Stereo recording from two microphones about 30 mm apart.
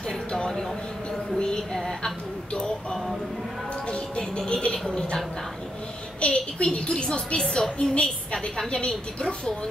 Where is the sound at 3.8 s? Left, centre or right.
Left.